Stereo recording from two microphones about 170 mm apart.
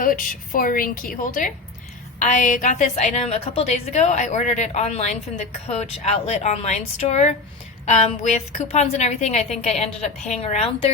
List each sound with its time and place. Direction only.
0.0 s a woman's voice: 55° left (ahead or behind); by 10.9 s 35° left (ahead or behind)